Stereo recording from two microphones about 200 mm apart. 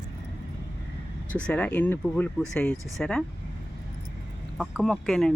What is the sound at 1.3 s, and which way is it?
Speech, 5° left (ahead or behind).